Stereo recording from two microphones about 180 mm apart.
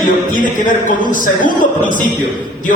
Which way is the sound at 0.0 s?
50° left (ahead or behind).